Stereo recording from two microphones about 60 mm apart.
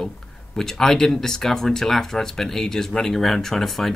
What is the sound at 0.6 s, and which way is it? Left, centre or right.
Speech, centre.